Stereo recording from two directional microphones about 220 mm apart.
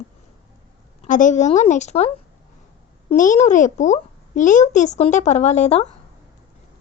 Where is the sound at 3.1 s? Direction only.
35° left (ahead or behind).